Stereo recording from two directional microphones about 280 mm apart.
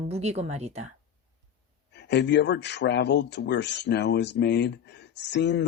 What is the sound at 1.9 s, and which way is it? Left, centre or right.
Speech, left.